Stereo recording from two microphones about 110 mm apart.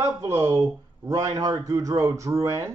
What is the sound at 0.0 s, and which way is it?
Speech, 30° right (ahead or behind).